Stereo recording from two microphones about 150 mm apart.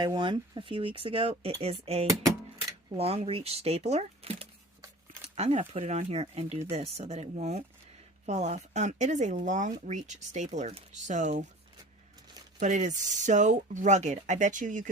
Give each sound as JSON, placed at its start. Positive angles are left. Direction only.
{"t": 0.0, "sound": "speech", "side_deg": -30}
{"t": 12.5, "sound": "speech", "side_deg": -55}